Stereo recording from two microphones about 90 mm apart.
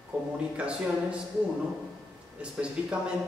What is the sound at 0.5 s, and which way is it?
Speech, 10° right (ahead or behind).